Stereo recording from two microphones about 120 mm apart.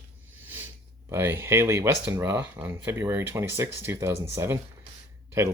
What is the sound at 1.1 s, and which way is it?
Speech, 20° right (ahead or behind).